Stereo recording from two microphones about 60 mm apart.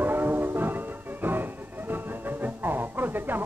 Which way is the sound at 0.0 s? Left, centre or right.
Right.